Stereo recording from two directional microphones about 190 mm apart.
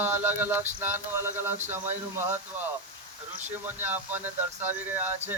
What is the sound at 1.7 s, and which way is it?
Speech, 10° right (ahead or behind).